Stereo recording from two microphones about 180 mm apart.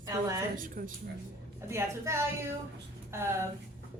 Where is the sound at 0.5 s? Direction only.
50° right (ahead or behind).